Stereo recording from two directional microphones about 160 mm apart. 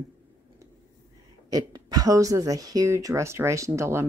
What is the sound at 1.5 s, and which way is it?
Speech, 25° right (ahead or behind).